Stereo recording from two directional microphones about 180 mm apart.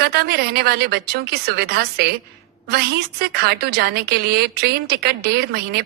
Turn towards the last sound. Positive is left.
turn(degrees=-60)  # may be behind; listen again after turning